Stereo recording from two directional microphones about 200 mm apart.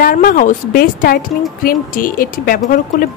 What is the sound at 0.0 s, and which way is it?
Speech, 45° left (ahead or behind).